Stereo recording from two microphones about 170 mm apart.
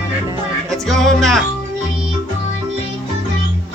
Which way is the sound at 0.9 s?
Centre (ahead or behind).